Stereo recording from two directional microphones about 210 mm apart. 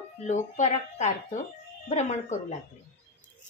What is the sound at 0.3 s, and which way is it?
A woman's voice, 35° left (ahead or behind).